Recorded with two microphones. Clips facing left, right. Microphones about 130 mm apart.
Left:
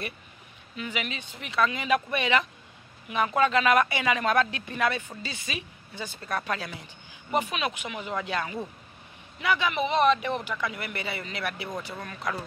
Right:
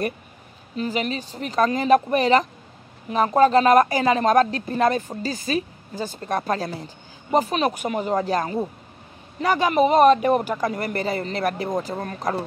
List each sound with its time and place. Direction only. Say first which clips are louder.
0.7 s a woman's voice: right 9 dB; 35° right (ahead or behind)